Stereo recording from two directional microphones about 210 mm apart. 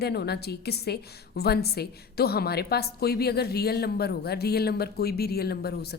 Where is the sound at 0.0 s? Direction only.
50° left (ahead or behind).